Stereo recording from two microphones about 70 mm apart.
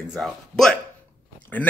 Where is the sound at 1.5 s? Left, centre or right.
Left.